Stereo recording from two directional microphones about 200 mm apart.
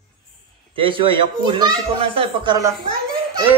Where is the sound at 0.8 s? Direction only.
25° right (ahead or behind).